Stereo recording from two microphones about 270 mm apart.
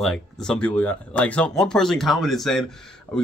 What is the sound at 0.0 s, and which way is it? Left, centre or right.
Speech, centre.